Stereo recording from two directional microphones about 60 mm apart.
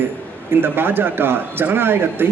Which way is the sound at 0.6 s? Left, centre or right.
Right.